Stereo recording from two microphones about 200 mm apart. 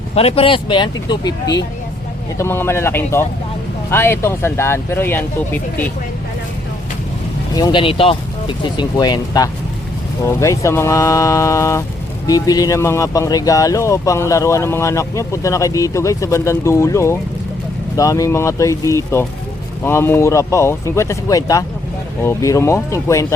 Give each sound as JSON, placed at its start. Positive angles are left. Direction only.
{"t": 0.1, "sound": "speech", "side_deg": 30}
{"t": 7.5, "sound": "speech", "side_deg": 20}